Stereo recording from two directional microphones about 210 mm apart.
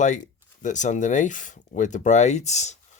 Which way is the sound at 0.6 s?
35° left (ahead or behind).